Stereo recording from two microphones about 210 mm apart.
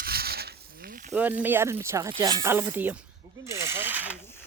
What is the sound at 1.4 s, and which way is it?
Speech, 10° right (ahead or behind).